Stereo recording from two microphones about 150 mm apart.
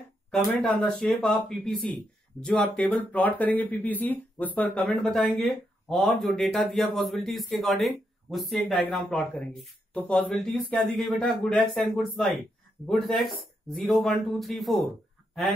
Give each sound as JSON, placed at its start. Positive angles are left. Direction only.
{"t": 0.6, "sound": "speech", "side_deg": 5}